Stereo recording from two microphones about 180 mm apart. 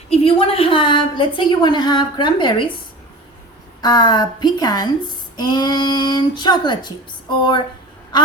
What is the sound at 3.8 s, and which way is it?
A woman's voice, 25° left (ahead or behind).